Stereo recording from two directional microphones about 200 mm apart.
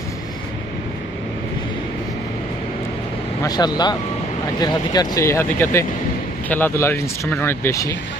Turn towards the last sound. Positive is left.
turn(degrees=15)  # may be behind; listen again after turning